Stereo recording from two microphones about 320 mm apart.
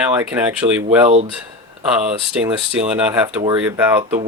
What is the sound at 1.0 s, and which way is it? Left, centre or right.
Speech, centre.